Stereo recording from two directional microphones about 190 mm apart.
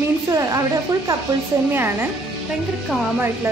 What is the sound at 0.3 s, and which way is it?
Speech, 15° right (ahead or behind).